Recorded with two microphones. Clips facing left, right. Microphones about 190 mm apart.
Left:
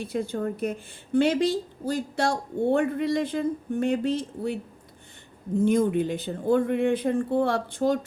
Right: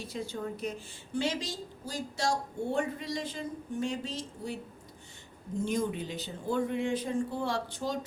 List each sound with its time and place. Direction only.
0.0 s a woman's voice: 55° left (ahead or behind)
5.5 s a woman's voice: 55° left (ahead or behind)